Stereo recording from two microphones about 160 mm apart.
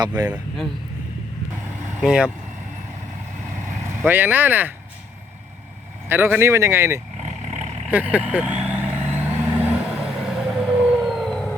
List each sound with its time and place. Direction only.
0.3 s a man's voice: centre (ahead or behind)
2.0 s speech: 5° right (ahead or behind)
4.0 s speech: 15° right (ahead or behind)
6.1 s speech: 15° right (ahead or behind)
8.9 s vehicle: 10° right (ahead or behind); by 11.5 s 5° left (ahead or behind)